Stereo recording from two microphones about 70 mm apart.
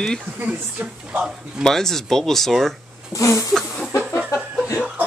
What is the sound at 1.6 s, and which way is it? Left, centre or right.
Speech, centre.